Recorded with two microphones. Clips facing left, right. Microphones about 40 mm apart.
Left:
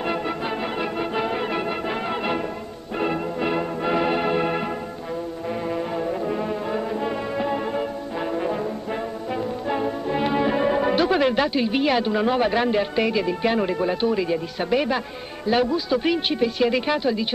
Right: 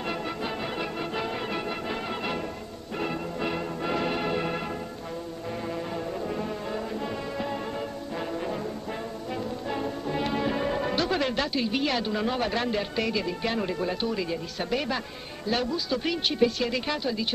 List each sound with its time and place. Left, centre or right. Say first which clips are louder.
0.7 s music: left 6 dB; centre
5.7 s music: left 7 dB; left
8.3 s brass instrument: left 8 dB; left
9.7 s speech: left 7 dB; left